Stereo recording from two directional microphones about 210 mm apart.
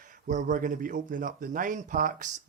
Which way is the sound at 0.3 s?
35° right (ahead or behind).